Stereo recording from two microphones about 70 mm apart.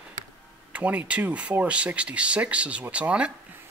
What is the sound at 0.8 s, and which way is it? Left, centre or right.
Speech, centre.